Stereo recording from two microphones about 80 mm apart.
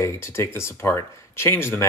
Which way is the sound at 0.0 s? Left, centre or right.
Left.